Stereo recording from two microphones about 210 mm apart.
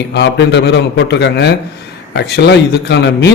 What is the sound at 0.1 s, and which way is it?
A man's voice, 55° left (ahead or behind).